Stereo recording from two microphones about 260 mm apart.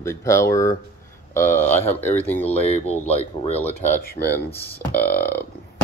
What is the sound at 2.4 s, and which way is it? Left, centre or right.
Speech, left.